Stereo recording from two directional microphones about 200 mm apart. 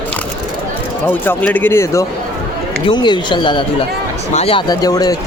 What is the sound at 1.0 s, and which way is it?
Speech, 10° left (ahead or behind).